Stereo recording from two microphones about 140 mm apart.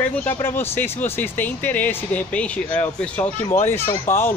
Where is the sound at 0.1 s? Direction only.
10° left (ahead or behind).